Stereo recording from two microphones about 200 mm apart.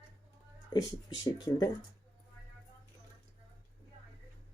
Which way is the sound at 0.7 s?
20° left (ahead or behind).